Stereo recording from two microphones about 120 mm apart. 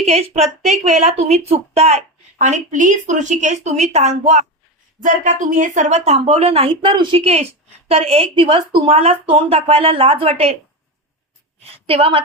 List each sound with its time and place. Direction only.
0.1 s a woman's voice: 60° right (ahead or behind)
4.9 s speech: 90° right; by 7.2 s 45° right (ahead or behind)
7.9 s speech: 55° right (ahead or behind)
11.9 s speech: 50° right (ahead or behind)